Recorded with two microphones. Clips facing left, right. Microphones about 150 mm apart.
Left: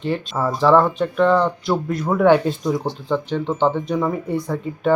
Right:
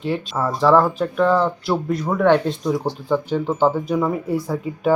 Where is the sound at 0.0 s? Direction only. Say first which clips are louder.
Even; centre (ahead or behind).